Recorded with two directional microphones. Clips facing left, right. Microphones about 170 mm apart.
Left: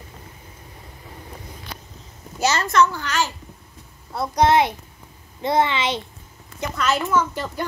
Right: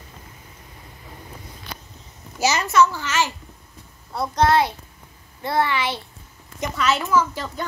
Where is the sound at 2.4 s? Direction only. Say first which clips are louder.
Even; 10° right (ahead or behind).